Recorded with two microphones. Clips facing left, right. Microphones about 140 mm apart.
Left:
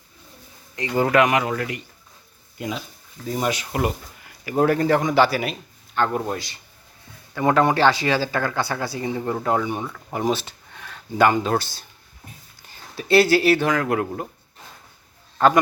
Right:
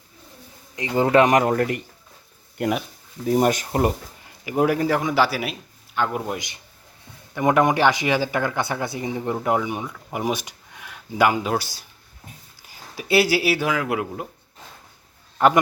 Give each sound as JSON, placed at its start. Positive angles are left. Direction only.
{"t": 0.8, "sound": "a man's voice", "side_deg": -20}
{"t": 1.2, "sound": "speech", "side_deg": -40}
{"t": 2.6, "sound": "speech", "side_deg": -60}
{"t": 3.3, "sound": "speech", "side_deg": -45}
{"t": 4.4, "sound": "speech", "side_deg": -10}